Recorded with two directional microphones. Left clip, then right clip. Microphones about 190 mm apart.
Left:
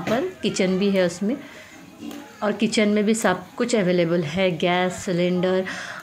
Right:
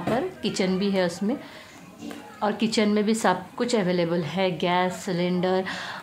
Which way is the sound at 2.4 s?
5° left (ahead or behind).